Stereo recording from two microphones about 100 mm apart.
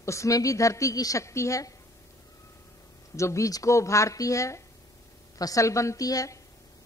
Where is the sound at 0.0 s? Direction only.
30° left (ahead or behind).